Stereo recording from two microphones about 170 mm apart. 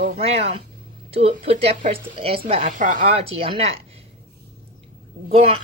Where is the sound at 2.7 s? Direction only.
50° right (ahead or behind).